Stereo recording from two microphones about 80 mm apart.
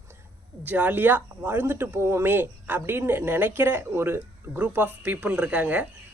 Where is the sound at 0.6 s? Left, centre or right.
Right.